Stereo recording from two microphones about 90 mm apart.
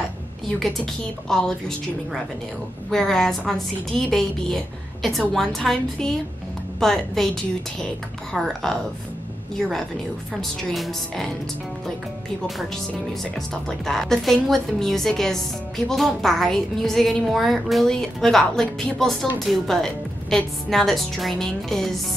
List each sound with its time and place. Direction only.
1.3 s a woman's voice: 10° left (ahead or behind)
2.9 s a woman's voice: 5° left (ahead or behind)
13.2 s a woman's voice: 5° left (ahead or behind)